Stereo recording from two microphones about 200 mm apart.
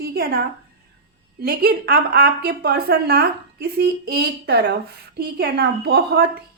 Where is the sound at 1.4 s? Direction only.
50° right (ahead or behind).